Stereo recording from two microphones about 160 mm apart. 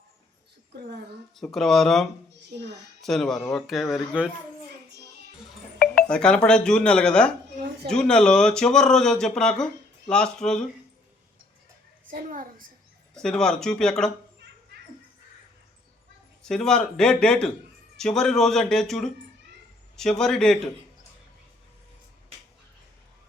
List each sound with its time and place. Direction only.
0.7 s speech: 85° right
1.4 s speech: centre (ahead or behind)
2.5 s a woman's voice: 90° right
3.0 s speech: centre (ahead or behind)
5.8 s speech: 5° left (ahead or behind)
12.1 s a child's voice: 60° right (ahead or behind)
13.1 s speech: 5° left (ahead or behind)
16.4 s speech: 5° left (ahead or behind)